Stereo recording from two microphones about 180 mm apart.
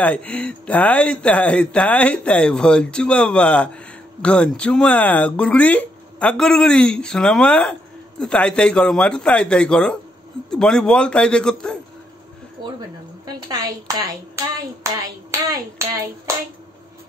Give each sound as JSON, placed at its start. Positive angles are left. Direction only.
{"t": 0.0, "sound": "speech", "side_deg": 10}
{"t": 13.3, "sound": "a woman's voice", "side_deg": -20}